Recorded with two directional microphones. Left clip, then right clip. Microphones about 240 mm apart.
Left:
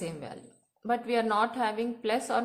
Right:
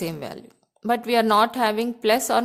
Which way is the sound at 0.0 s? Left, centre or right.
Right.